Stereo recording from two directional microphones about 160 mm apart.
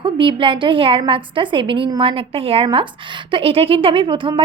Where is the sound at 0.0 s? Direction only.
30° right (ahead or behind).